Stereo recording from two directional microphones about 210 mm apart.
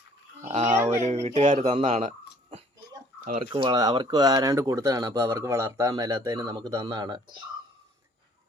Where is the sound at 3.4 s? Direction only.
25° right (ahead or behind).